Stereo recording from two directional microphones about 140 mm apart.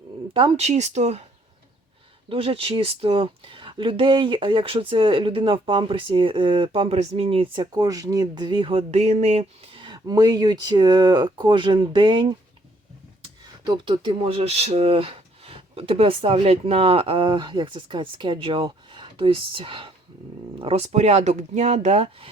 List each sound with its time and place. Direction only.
0.3 s speech: 40° right (ahead or behind)
0.7 s speech: 55° right (ahead or behind)
2.3 s speech: 45° right (ahead or behind)